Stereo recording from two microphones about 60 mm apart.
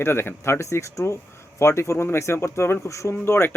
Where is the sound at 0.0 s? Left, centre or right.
Left.